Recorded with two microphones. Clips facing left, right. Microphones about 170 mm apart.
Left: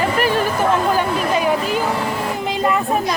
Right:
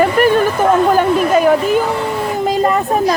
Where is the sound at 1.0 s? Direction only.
50° right (ahead or behind).